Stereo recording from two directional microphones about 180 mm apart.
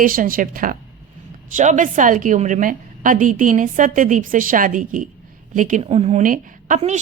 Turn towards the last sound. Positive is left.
turn(degrees=-45)  # may be behind; listen again after turning